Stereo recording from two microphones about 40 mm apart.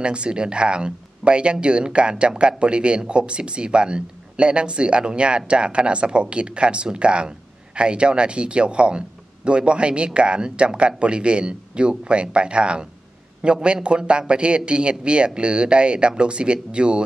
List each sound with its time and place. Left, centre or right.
0.0 s a man's voice: right